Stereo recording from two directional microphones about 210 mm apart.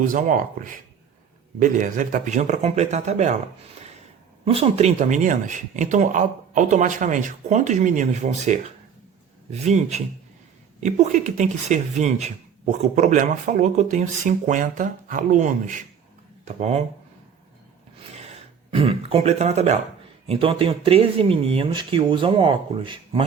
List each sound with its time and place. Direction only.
0.0 s speech: 40° right (ahead or behind)
4.4 s speech: 30° right (ahead or behind)
18.1 s speech: 30° right (ahead or behind)